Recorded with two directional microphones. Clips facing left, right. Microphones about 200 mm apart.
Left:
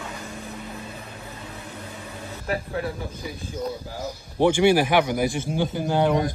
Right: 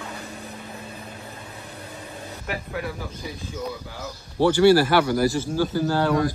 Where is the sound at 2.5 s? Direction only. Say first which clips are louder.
Left 3 dB; 30° left (ahead or behind).